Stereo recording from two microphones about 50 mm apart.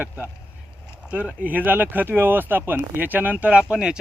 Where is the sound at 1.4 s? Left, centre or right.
Right.